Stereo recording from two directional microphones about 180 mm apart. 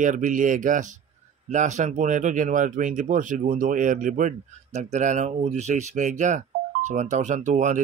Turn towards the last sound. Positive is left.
turn(degrees=-45)  # may be behind; listen again after turning